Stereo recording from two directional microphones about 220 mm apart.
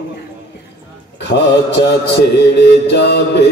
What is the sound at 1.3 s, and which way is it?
Mantra, 50° left (ahead or behind).